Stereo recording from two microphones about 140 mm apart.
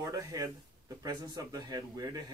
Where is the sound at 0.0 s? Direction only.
25° right (ahead or behind).